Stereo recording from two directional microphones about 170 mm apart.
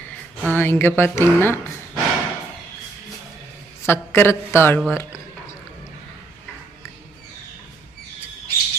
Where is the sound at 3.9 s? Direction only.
15° left (ahead or behind).